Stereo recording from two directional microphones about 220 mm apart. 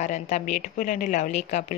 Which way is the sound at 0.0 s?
35° left (ahead or behind).